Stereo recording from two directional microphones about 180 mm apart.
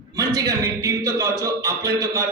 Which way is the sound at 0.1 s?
20° right (ahead or behind).